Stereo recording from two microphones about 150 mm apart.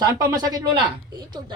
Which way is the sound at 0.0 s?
25° right (ahead or behind).